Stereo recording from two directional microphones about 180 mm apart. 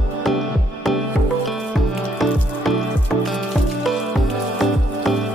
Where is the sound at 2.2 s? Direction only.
Centre (ahead or behind).